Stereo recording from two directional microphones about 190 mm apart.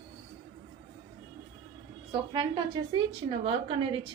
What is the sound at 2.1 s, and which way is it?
A woman's voice, 25° right (ahead or behind).